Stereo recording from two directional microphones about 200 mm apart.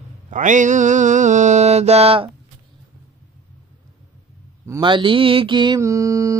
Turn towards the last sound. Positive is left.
turn(degrees=-15)  # may be behind; listen again after turning